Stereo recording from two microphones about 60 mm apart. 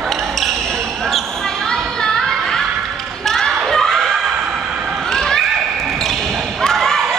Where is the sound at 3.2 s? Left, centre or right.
Centre.